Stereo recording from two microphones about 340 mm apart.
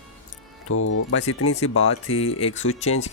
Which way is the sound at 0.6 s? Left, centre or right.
Left.